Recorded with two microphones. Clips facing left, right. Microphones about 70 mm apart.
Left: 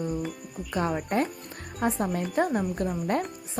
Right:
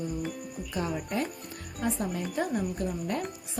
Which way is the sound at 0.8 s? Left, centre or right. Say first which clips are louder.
Left 5 dB; left.